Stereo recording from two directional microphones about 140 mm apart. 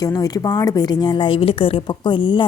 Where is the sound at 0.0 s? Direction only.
25° left (ahead or behind).